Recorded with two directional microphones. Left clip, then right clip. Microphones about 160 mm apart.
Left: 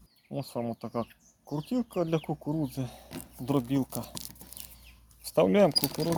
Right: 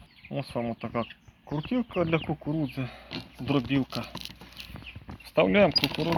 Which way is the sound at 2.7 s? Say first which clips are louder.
Right 3 dB; 25° left (ahead or behind).